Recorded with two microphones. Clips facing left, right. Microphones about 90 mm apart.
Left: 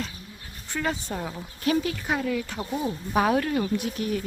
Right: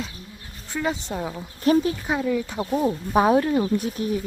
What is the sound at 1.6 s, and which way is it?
Speech, 35° right (ahead or behind).